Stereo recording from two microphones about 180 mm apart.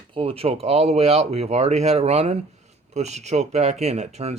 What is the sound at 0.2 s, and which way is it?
Speech, 30° right (ahead or behind).